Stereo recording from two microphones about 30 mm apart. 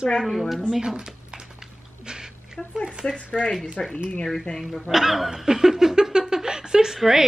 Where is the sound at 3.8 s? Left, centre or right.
Left.